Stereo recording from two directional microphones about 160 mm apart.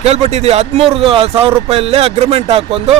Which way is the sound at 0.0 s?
40° right (ahead or behind).